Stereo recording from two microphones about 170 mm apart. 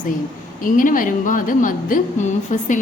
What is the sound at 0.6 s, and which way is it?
A woman's voice, 55° left (ahead or behind).